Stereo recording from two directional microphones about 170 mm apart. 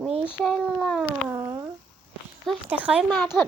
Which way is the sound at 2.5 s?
5° right (ahead or behind).